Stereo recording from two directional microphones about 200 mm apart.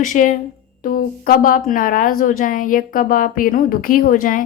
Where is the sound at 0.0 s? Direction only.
40° left (ahead or behind).